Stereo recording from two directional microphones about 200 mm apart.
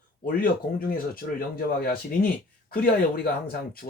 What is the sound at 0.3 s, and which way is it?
Speech, 45° left (ahead or behind).